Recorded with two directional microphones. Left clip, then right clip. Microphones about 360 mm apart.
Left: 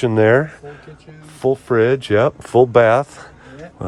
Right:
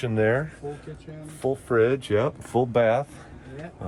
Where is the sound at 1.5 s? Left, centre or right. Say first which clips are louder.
Left 6 dB; left.